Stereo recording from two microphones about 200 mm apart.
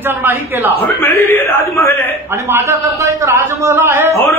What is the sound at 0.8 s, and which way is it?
A man's voice, 10° left (ahead or behind).